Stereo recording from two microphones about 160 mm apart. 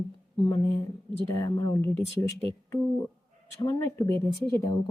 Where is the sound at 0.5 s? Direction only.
15° left (ahead or behind).